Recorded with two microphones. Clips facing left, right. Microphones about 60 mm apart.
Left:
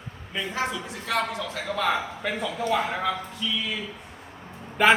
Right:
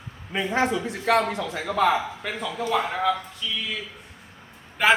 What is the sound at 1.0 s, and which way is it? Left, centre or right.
Speech, right.